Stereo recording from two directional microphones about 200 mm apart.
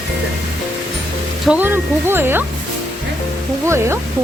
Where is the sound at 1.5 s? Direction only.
10° right (ahead or behind).